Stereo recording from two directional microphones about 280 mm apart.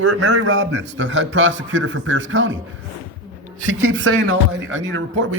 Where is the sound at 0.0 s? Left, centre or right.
Right.